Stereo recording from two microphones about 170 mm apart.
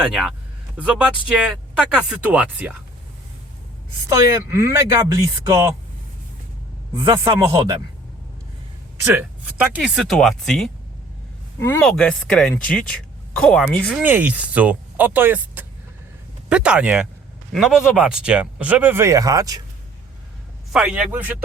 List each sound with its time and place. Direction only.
0.0 s speech: 5° right (ahead or behind)
4.1 s speech: 15° right (ahead or behind)
6.9 s speech: 30° right (ahead or behind)
9.0 s speech: 10° right (ahead or behind)
11.8 s speech: 5° left (ahead or behind)
14.0 s speech: 10° right (ahead or behind)
20.7 s speech: 5° right (ahead or behind)